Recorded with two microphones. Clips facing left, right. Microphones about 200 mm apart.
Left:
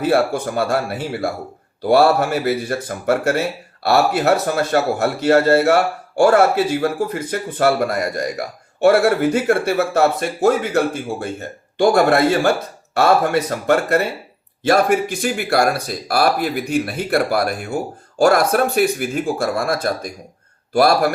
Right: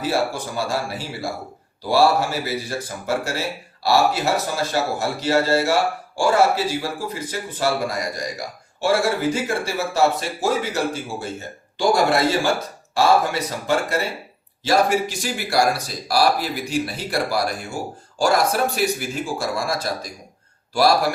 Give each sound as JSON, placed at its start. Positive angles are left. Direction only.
{"t": 0.0, "sound": "a man's voice", "side_deg": 60}